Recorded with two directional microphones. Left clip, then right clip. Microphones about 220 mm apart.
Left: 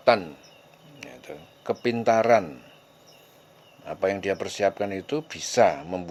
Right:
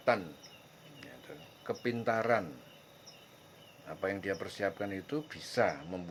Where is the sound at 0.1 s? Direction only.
30° left (ahead or behind).